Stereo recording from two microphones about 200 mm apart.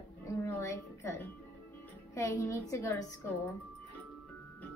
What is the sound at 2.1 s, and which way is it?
Speech, 15° left (ahead or behind).